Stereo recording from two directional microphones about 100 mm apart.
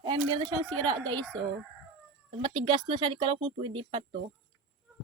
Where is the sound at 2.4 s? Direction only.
60° right (ahead or behind).